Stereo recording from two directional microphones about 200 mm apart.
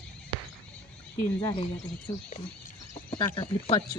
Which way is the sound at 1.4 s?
25° left (ahead or behind).